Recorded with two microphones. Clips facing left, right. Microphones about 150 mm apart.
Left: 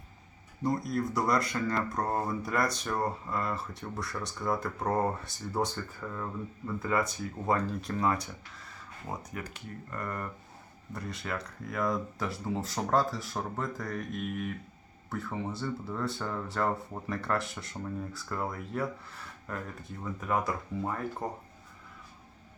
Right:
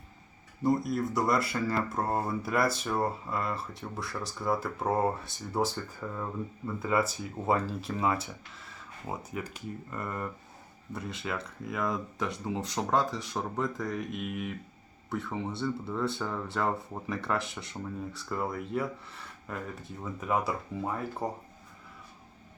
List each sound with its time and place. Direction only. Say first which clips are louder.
0.6 s speech: right 3 dB; centre (ahead or behind)
10.9 s speech: right 1 dB; centre (ahead or behind)
12.3 s speech: even; 20° right (ahead or behind)
12.9 s speech: left 1 dB; centre (ahead or behind)
13.9 s speech: right 1 dB; 10° right (ahead or behind)